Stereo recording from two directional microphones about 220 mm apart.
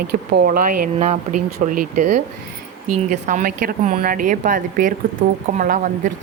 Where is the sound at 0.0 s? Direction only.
45° right (ahead or behind).